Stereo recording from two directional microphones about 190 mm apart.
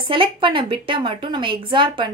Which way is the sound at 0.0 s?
25° right (ahead or behind).